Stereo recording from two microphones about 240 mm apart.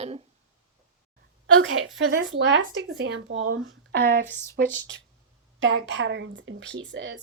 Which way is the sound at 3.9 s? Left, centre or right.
Right.